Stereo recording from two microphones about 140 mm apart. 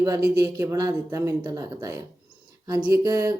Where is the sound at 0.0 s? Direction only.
25° right (ahead or behind).